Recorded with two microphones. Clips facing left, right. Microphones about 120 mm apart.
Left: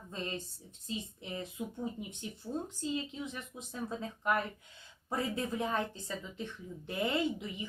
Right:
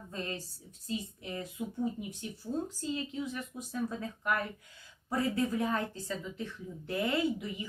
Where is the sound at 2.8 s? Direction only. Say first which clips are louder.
Right 1 dB; 20° left (ahead or behind).